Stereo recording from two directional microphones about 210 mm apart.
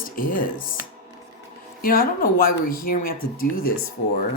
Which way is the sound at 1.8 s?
45° left (ahead or behind).